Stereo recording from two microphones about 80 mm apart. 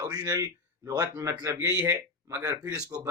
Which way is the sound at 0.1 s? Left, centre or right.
Right.